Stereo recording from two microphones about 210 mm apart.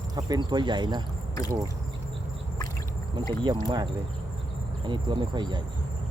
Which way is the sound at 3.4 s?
20° right (ahead or behind).